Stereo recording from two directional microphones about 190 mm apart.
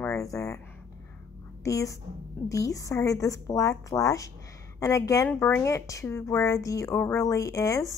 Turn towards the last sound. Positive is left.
turn(degrees=15)  # may be behind; listen again after turning